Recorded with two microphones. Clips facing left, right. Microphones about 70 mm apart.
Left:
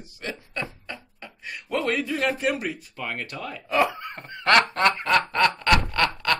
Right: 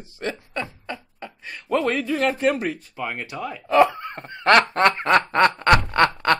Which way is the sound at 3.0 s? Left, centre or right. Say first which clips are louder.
Right 3 dB; centre.